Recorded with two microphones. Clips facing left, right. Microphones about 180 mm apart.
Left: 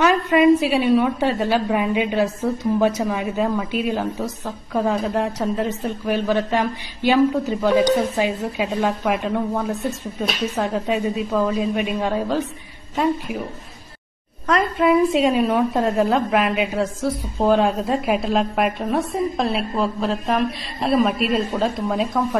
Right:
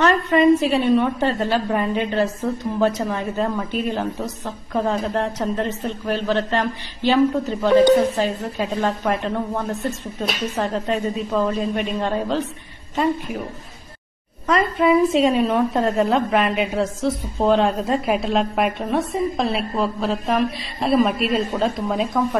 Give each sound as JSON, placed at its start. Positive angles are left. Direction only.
{"t": 0.0, "sound": "a woman's voice", "side_deg": 0}
{"t": 14.4, "sound": "a woman's voice", "side_deg": 0}